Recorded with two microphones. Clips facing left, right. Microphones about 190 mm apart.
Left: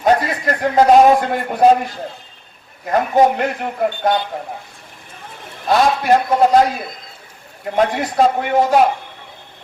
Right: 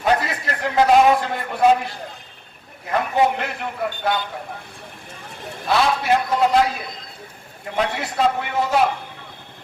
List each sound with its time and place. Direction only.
0.0 s a man's voice: 45° left (ahead or behind)
2.9 s a man's voice: 45° left (ahead or behind)
5.6 s a man's voice: 45° left (ahead or behind)
7.8 s a man's voice: 45° left (ahead or behind)